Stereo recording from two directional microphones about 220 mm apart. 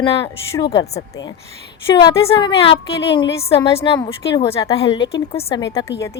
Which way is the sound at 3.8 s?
20° left (ahead or behind).